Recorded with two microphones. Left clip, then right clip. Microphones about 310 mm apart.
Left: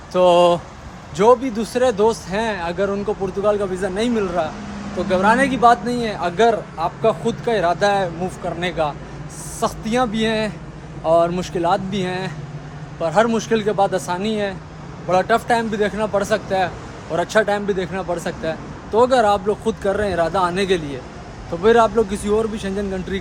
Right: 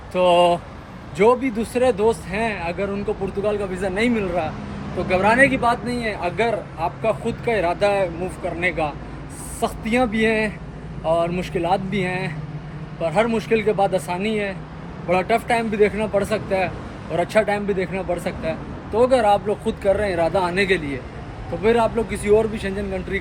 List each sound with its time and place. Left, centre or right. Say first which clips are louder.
0.1 s speech: left 2 dB; centre
9.6 s speech: left 1 dB; centre